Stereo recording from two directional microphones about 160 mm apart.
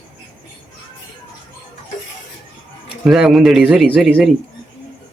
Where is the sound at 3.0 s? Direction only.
Centre (ahead or behind).